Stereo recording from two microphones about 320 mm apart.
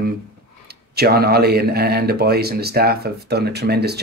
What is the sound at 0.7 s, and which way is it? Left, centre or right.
Speech, right.